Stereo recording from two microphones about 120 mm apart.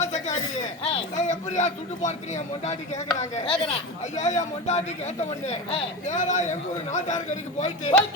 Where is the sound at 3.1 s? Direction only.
60° left (ahead or behind).